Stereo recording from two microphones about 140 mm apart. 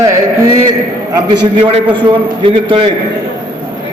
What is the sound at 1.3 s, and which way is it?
A man's voice, 35° right (ahead or behind).